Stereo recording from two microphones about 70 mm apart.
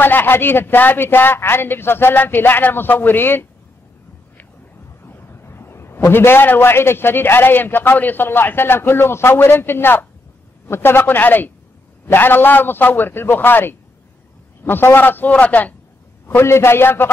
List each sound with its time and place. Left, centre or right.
0.0 s a man's voice: left
5.0 s a sound: left
6.1 s a man's voice: left
16.3 s a man's voice: left